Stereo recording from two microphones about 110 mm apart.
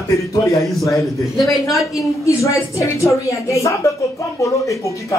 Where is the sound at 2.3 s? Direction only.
30° left (ahead or behind).